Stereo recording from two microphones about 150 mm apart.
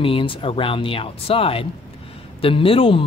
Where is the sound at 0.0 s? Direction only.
35° left (ahead or behind).